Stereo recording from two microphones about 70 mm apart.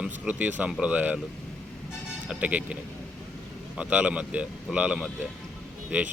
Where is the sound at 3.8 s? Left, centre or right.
Centre.